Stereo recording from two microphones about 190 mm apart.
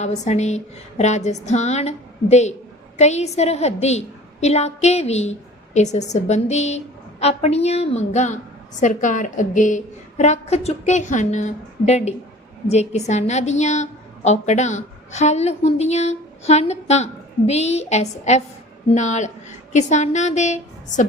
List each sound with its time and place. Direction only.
0.0 s a woman's voice: 35° left (ahead or behind)